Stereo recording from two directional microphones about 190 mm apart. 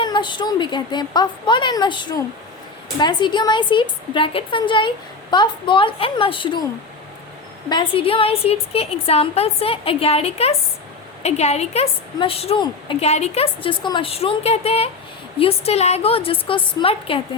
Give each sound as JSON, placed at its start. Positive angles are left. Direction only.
{"t": 0.0, "sound": "a woman's voice", "side_deg": 25}
{"t": 7.7, "sound": "a woman's voice", "side_deg": 25}